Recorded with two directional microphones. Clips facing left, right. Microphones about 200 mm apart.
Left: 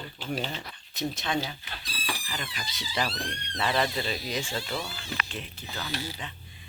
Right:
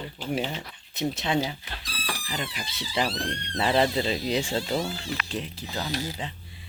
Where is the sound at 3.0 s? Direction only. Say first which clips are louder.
Right 4 dB; 25° right (ahead or behind).